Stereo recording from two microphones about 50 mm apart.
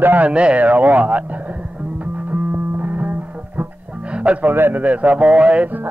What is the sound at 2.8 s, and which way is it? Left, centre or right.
Music, right.